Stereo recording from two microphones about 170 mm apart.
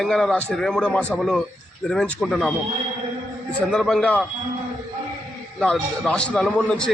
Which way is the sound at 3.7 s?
Centre (ahead or behind).